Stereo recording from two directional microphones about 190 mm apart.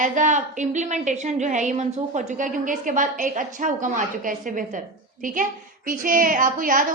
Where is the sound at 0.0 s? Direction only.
40° right (ahead or behind).